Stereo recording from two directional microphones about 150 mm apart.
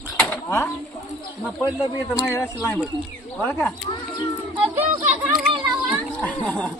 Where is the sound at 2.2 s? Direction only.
20° left (ahead or behind).